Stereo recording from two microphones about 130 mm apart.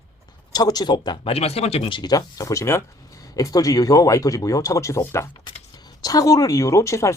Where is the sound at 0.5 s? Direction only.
30° left (ahead or behind); by 2.0 s 50° left (ahead or behind).